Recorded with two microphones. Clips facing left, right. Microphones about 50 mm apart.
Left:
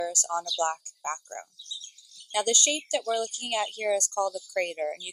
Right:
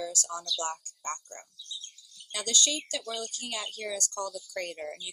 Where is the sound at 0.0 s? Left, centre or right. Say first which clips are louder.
Left 6 dB; left.